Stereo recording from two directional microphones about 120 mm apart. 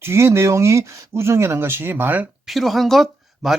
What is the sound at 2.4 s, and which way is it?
Speech, centre (ahead or behind).